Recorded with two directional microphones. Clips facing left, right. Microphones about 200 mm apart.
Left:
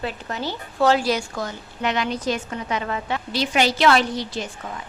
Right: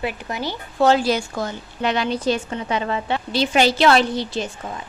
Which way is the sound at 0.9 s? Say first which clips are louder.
Right 2 dB; 25° right (ahead or behind).